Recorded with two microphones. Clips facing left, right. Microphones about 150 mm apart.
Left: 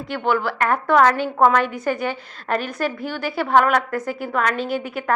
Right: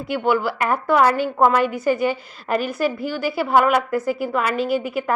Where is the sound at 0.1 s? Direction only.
5° right (ahead or behind).